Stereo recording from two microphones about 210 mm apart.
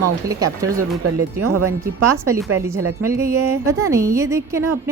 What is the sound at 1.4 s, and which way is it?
Speech, 90° right.